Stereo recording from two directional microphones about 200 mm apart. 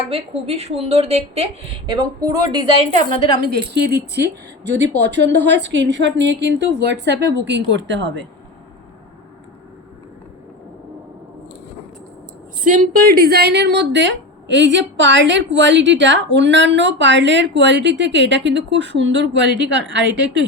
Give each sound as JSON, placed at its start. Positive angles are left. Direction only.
{"t": 0.1, "sound": "a woman's voice", "side_deg": -30}
{"t": 3.8, "sound": "a woman's voice", "side_deg": -55}
{"t": 12.6, "sound": "a woman's voice", "side_deg": -40}